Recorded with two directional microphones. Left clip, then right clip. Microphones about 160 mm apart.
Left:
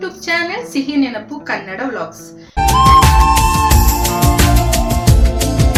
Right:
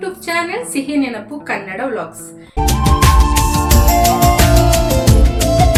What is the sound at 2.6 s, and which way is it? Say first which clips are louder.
Music: left 7 dB; centre (ahead or behind).